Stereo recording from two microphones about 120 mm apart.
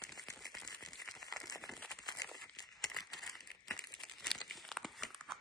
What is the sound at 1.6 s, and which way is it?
Crumpling, 5° left (ahead or behind).